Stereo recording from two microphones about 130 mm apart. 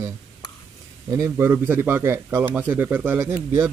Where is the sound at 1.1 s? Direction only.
20° right (ahead or behind).